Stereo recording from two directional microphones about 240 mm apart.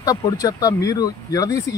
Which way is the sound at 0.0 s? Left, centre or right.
Centre.